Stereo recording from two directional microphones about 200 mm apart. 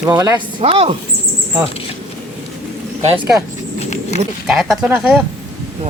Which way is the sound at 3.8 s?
35° left (ahead or behind).